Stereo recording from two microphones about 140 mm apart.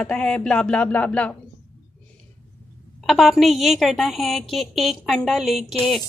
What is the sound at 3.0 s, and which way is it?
A woman's voice, centre (ahead or behind).